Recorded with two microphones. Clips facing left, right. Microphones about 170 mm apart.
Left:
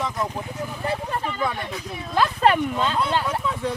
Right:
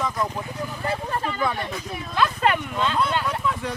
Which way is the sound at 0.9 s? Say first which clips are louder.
Even; 15° left (ahead or behind).